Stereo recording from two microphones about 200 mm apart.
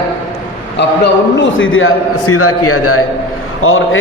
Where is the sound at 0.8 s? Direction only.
60° left (ahead or behind).